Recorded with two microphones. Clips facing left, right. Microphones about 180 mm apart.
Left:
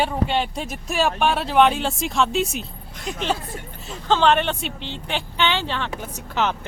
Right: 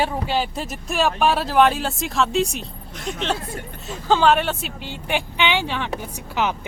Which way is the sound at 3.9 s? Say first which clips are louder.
Right 1 dB; 5° right (ahead or behind).